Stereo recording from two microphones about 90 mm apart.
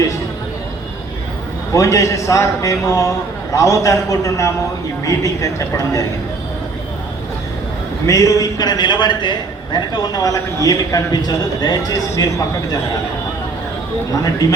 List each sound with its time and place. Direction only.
1.7 s a man's voice: 35° left (ahead or behind)
8.0 s a man's voice: 35° left (ahead or behind)